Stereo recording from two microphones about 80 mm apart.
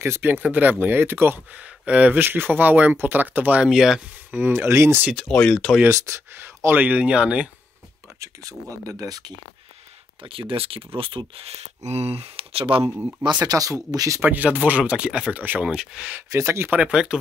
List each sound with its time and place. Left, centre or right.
0.0 s speech: right
0.3 s speech: right
1.6 s speech: centre
3.6 s speech: centre
4.3 s speech: right
5.3 s speech: centre
5.9 s speech: right
6.3 s speech: right
8.2 s speech: right
10.2 s speech: right
13.2 s speech: right
14.2 s speech: right
16.3 s speech: right
16.7 s speech: centre